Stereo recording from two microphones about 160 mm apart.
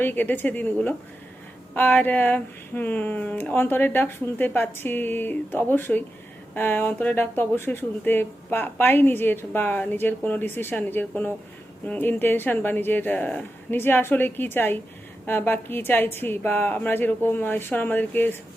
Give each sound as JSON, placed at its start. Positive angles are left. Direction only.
{"t": 0.0, "sound": "speech", "side_deg": 10}